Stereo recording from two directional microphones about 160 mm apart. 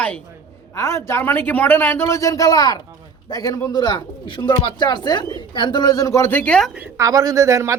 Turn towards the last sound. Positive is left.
turn(degrees=-20)  # may be behind; listen again after turning